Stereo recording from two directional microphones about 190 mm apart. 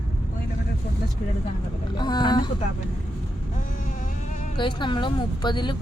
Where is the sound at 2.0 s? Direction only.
20° left (ahead or behind).